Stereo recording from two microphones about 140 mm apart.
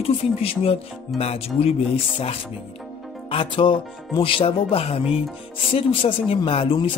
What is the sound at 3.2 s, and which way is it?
A man's voice, 40° left (ahead or behind).